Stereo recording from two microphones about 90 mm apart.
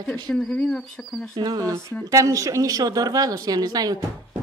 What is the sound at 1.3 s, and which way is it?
Speech, 55° right (ahead or behind).